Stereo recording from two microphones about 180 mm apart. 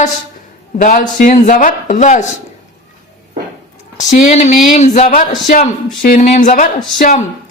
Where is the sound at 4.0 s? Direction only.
40° left (ahead or behind).